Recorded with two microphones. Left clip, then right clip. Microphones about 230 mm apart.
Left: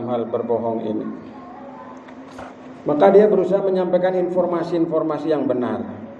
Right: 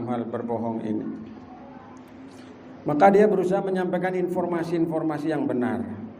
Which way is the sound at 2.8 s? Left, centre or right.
Right.